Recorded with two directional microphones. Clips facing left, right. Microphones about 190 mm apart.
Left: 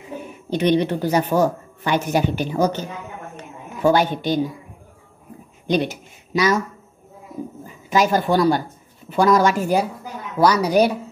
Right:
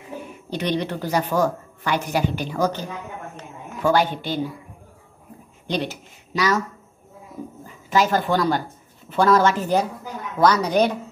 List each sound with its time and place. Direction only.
0.5 s a woman's voice: 20° left (ahead or behind)
3.3 s a sound: 15° left (ahead or behind)
5.7 s speech: 15° left (ahead or behind)
7.6 s speech: 15° left (ahead or behind)